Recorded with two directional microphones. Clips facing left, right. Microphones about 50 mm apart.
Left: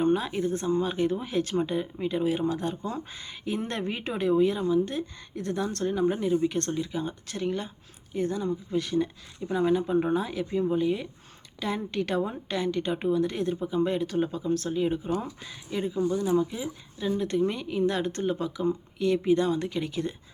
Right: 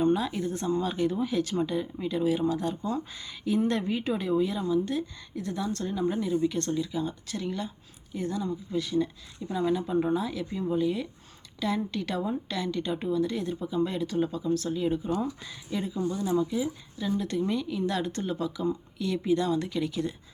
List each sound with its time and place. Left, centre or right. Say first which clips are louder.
0.0 s a woman's voice: left 1 dB; left
9.5 s a woman's voice: left 3 dB; left